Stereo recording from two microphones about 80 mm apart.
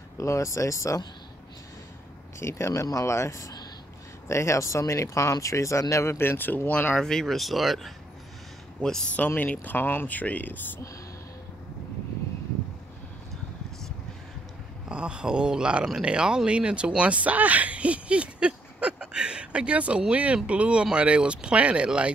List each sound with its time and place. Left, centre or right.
0.2 s speech: left
2.4 s speech: left
7.0 s speech: centre
8.8 s speech: centre
14.9 s speech: centre